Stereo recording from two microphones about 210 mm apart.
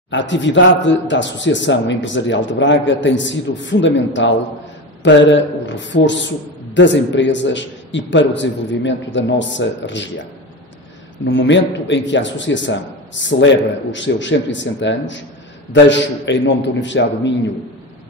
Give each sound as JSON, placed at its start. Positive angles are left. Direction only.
{"t": 0.1, "sound": "speech", "side_deg": 60}
{"t": 11.2, "sound": "speech", "side_deg": 60}